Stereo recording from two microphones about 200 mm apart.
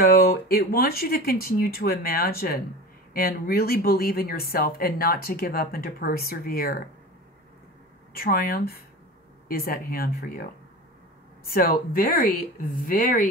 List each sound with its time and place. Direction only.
0.0 s speech: 50° left (ahead or behind)
8.1 s speech: 50° left (ahead or behind)
11.5 s speech: 45° left (ahead or behind)